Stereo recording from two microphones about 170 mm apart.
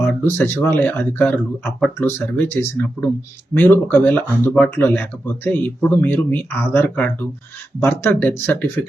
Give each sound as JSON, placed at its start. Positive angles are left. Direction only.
{"t": 0.0, "sound": "speech", "side_deg": 15}